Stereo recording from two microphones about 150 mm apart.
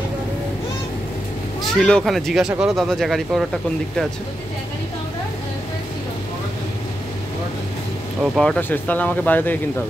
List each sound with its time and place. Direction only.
1.6 s speech: 5° left (ahead or behind)
8.2 s speech: 5° left (ahead or behind)